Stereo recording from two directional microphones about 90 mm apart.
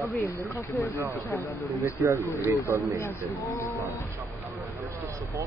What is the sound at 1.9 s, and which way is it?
Speech, 35° right (ahead or behind).